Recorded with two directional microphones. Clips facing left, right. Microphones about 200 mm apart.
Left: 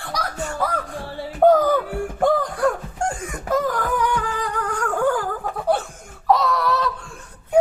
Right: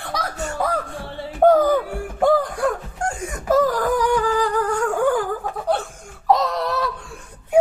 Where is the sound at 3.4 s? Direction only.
35° right (ahead or behind).